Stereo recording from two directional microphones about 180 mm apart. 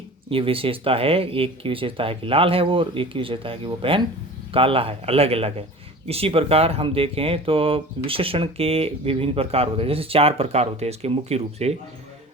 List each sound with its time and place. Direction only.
0.3 s speech: 30° right (ahead or behind)